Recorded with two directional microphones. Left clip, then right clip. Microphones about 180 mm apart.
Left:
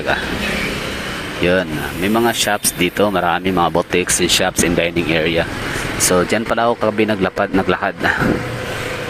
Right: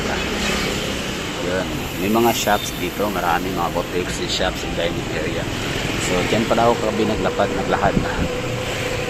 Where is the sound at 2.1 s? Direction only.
25° left (ahead or behind).